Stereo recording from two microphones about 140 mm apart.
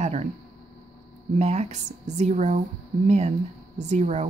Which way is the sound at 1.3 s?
50° right (ahead or behind).